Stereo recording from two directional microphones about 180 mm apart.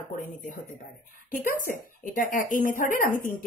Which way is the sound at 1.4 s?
50° left (ahead or behind).